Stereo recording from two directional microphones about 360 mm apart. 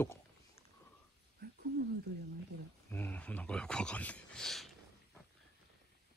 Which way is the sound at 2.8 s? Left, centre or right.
Centre.